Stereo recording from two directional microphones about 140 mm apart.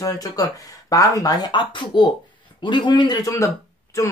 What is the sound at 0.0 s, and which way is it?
Speech, 25° left (ahead or behind).